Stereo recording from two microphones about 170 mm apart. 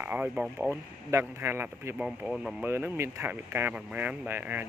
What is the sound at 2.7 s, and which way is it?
Speech, 15° right (ahead or behind).